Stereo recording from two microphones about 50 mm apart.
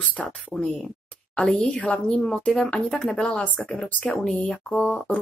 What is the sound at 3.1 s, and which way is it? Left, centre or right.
Speech, centre.